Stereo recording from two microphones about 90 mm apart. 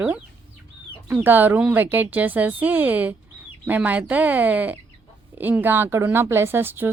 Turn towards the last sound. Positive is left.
turn(degrees=-25)  # may be behind; listen again after turning